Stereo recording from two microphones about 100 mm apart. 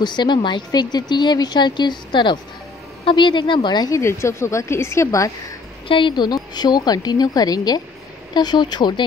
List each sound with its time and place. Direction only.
0.0 s a woman's voice: 50° left (ahead or behind)
4.0 s a woman's voice: 30° left (ahead or behind)
5.9 s a woman's voice: 55° left (ahead or behind)